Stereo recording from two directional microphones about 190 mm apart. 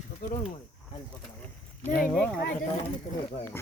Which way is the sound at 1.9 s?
45° left (ahead or behind).